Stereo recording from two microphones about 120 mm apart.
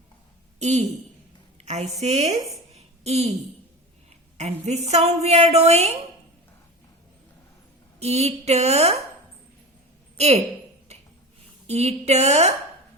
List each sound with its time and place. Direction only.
0.6 s a woman's voice: 70° right (ahead or behind)
2.7 s a sound: 60° right (ahead or behind)
4.4 s a woman's voice: 70° right (ahead or behind)
7.9 s a woman's voice: 60° right (ahead or behind)
10.2 s a woman's voice: 65° right (ahead or behind)
11.6 s a woman's voice: 60° right (ahead or behind)